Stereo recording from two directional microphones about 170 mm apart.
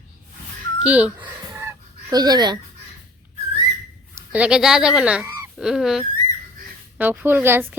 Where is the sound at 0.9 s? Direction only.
10° right (ahead or behind); by 2.6 s 25° right (ahead or behind).